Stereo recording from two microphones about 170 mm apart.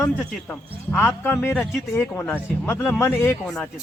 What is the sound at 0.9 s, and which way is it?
Speech, 10° left (ahead or behind).